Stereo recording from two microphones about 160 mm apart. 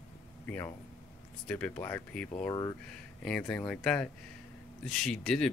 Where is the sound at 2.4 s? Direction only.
20° left (ahead or behind).